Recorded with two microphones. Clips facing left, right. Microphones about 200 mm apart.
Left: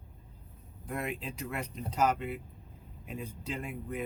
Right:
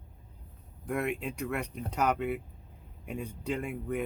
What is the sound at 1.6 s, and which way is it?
Speech, 65° right (ahead or behind).